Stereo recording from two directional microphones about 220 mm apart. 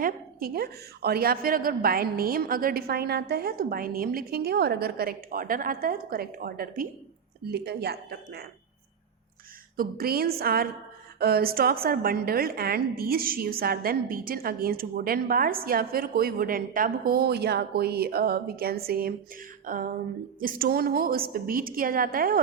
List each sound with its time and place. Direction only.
0.0 s a woman's voice: 40° right (ahead or behind)
9.7 s a woman's voice: 45° right (ahead or behind)